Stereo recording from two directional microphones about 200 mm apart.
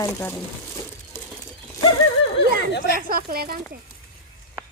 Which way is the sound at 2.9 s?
45° right (ahead or behind).